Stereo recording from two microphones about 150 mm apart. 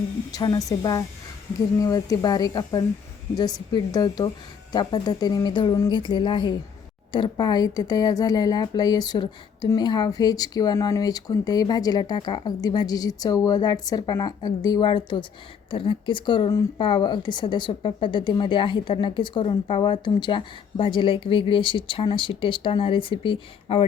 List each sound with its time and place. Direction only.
0.3 s a woman's voice: 25° left (ahead or behind)